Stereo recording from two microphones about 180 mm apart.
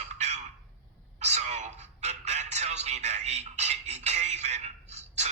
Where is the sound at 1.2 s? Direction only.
40° right (ahead or behind).